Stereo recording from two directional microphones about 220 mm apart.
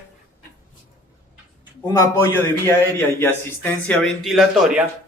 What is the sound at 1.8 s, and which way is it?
A man's voice, 15° left (ahead or behind).